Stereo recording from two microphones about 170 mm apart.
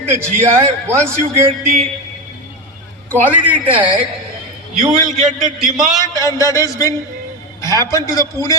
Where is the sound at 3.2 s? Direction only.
10° right (ahead or behind).